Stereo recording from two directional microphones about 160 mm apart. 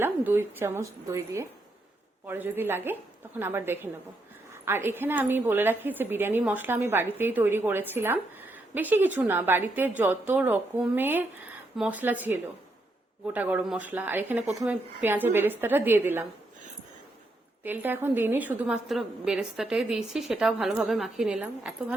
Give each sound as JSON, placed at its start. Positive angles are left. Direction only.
{"t": 0.0, "sound": "a woman's voice", "side_deg": -15}
{"t": 17.6, "sound": "a woman's voice", "side_deg": -10}